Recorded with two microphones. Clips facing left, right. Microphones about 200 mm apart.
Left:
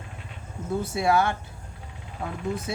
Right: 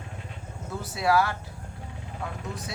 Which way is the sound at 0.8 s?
25° left (ahead or behind).